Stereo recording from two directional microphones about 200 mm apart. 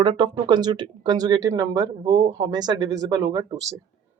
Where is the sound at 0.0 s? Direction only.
20° right (ahead or behind).